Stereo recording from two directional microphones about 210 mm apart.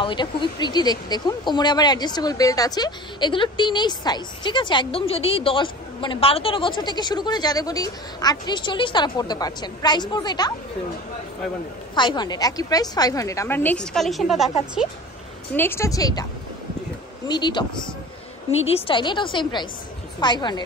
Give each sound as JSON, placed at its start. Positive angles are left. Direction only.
{"t": 0.0, "sound": "speech", "side_deg": 20}
{"t": 11.9, "sound": "a woman's voice", "side_deg": 20}
{"t": 15.5, "sound": "a woman's voice", "side_deg": 10}
{"t": 17.3, "sound": "speech", "side_deg": 20}
{"t": 18.7, "sound": "speech", "side_deg": 25}